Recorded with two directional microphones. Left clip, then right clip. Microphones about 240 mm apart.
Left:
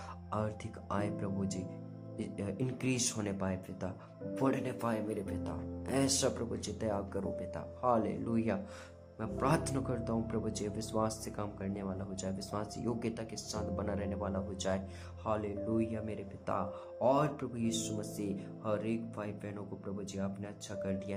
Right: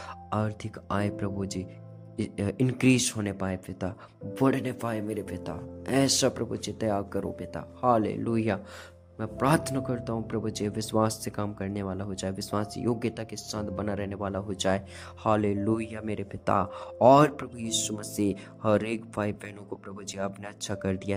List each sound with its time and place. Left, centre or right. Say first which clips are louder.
0.3 s a man's voice: right 6 dB; right